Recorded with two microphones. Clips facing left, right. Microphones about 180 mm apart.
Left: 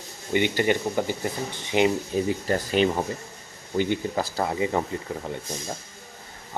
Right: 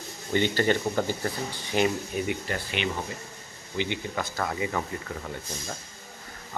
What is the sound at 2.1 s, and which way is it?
Speech, 35° left (ahead or behind).